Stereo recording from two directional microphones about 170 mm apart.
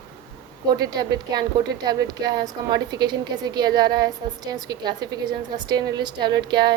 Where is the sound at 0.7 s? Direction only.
25° right (ahead or behind).